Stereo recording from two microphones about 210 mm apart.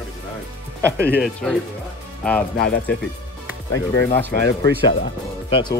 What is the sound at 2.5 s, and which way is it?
Speech, 55° left (ahead or behind).